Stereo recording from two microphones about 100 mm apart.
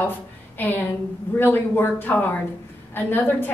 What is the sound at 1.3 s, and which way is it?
A woman's voice, 20° left (ahead or behind).